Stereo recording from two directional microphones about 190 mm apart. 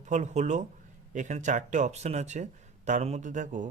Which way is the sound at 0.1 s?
40° right (ahead or behind).